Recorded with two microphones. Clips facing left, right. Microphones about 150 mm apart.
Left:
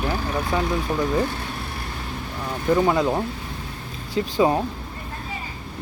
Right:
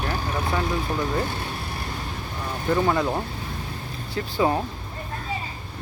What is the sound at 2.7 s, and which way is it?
Speech, 15° left (ahead or behind).